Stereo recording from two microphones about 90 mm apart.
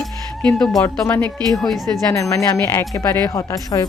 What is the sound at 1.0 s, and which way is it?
Speech, 20° left (ahead or behind).